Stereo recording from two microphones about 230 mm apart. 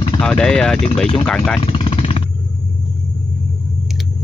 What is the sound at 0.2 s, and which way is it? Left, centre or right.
Speech, centre.